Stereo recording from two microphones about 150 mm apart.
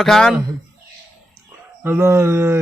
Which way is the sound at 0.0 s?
5° left (ahead or behind).